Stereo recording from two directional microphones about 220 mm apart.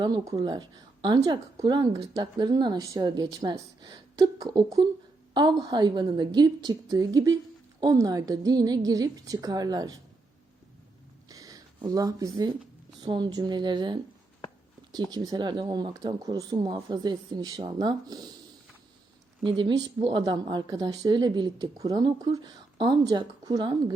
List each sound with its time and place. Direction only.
0.0 s a woman's voice: 15° right (ahead or behind)
11.3 s a sound: 15° right (ahead or behind)
13.0 s a woman's voice: 20° right (ahead or behind)
19.5 s a woman's voice: 20° right (ahead or behind)